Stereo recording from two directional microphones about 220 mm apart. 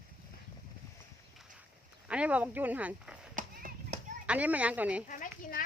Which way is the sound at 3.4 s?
35° right (ahead or behind).